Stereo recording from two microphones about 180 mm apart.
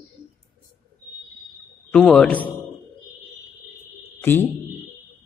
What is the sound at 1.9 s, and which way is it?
Speech, 5° left (ahead or behind).